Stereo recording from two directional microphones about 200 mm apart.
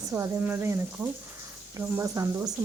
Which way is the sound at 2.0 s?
15° right (ahead or behind).